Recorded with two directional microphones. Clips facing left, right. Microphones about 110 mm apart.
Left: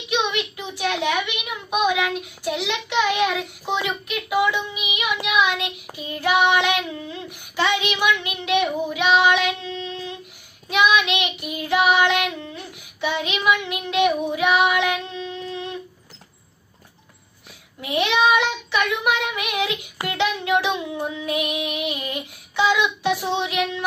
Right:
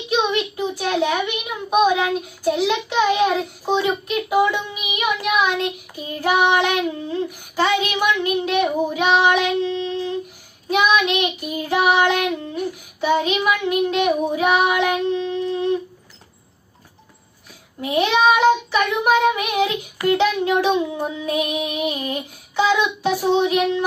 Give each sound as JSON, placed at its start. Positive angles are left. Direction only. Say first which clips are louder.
{"t": 0.1, "sound": "a child's voice", "louder": "right 3 dB", "side_deg": -35}
{"t": 4.1, "sound": "child singing", "louder": "right 2 dB", "side_deg": -40}
{"t": 5.9, "sound": "a child's voice", "louder": "right 1 dB", "side_deg": -40}
{"t": 7.1, "sound": "child singing", "louder": "right 9 dB", "side_deg": -40}
{"t": 10.7, "sound": "a child's voice", "louder": "right 1 dB", "side_deg": -40}
{"t": 17.7, "sound": "a child's voice", "louder": "right 3 dB", "side_deg": -40}